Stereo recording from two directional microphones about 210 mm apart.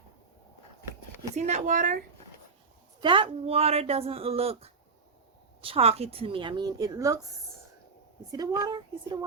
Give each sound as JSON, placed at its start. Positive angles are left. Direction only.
{"t": 1.4, "sound": "speech", "side_deg": -35}
{"t": 3.0, "sound": "speech", "side_deg": -25}
{"t": 8.3, "sound": "speech", "side_deg": -15}